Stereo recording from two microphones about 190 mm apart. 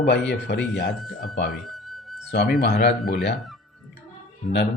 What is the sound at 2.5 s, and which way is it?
Speech, 60° left (ahead or behind).